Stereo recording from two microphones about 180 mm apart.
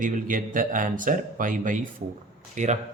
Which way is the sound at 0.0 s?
50° right (ahead or behind).